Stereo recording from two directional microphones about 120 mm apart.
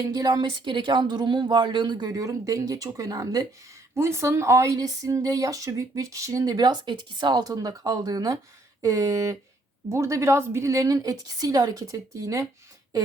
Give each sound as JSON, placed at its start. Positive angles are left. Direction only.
{"t": 0.1, "sound": "speech", "side_deg": -30}